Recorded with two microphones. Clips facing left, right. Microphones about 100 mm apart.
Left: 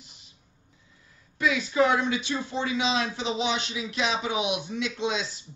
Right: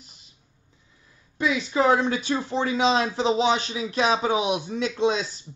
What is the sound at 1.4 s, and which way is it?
Speech, 30° right (ahead or behind).